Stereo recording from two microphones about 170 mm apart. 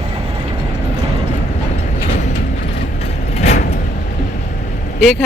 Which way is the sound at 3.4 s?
40° left (ahead or behind).